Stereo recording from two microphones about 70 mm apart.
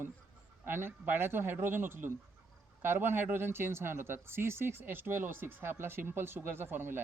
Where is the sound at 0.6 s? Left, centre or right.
Right.